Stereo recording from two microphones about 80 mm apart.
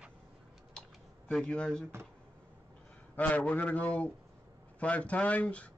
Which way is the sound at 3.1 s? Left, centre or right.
Centre.